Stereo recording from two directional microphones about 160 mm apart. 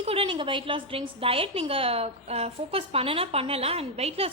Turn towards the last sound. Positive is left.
turn(degrees=-40)  # may be behind; listen again after turning